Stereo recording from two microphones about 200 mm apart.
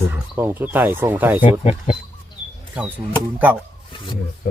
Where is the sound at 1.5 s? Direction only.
35° left (ahead or behind).